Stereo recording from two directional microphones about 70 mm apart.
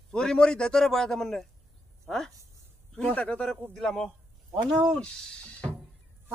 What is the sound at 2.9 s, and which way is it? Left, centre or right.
A man's voice, centre.